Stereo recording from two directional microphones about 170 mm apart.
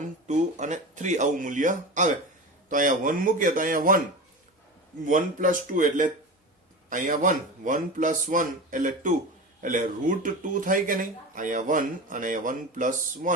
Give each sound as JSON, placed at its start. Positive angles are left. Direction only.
{"t": 0.0, "sound": "speech", "side_deg": -45}
{"t": 5.0, "sound": "speech", "side_deg": -50}